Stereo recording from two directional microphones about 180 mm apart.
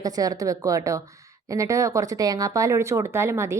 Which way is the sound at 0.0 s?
20° right (ahead or behind).